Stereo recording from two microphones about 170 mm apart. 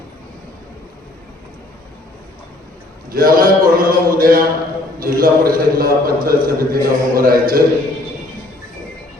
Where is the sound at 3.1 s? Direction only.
60° right (ahead or behind).